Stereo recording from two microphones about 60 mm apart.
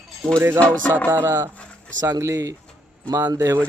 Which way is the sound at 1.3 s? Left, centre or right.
Right.